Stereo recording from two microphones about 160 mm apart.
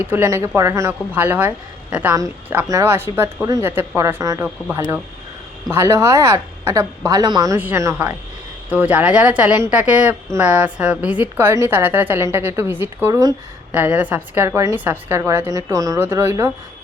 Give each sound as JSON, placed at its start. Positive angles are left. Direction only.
{"t": 0.0, "sound": "a woman's voice", "side_deg": -10}
{"t": 5.7, "sound": "a woman's voice", "side_deg": -15}
{"t": 13.7, "sound": "a woman's voice", "side_deg": -10}